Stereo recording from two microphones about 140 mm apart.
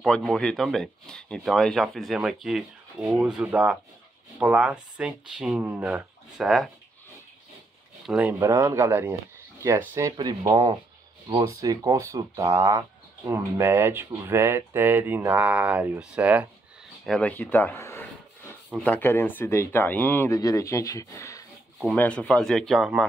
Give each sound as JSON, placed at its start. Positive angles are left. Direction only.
{"t": 0.0, "sound": "speech", "side_deg": 5}
{"t": 8.1, "sound": "speech", "side_deg": -10}
{"t": 8.4, "sound": "speech", "side_deg": -20}
{"t": 17.0, "sound": "speech", "side_deg": 5}
{"t": 20.3, "sound": "speech", "side_deg": 25}
{"t": 21.9, "sound": "speech", "side_deg": 10}